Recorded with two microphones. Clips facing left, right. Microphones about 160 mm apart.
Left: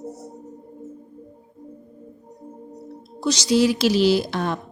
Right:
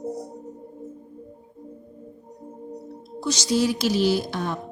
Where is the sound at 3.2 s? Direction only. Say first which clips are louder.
Left 4 dB; 80° left.